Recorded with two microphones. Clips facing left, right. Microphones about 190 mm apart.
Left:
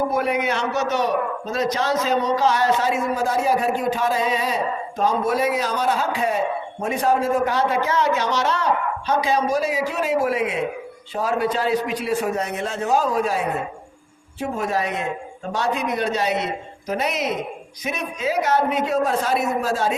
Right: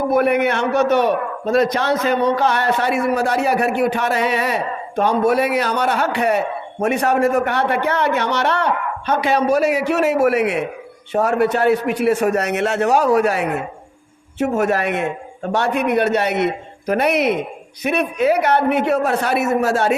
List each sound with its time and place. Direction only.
0.1 s a man's voice: 60° right (ahead or behind)